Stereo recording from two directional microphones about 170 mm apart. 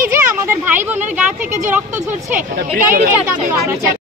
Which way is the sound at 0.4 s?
15° right (ahead or behind).